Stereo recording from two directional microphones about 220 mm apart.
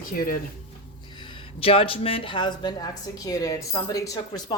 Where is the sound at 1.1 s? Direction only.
20° left (ahead or behind).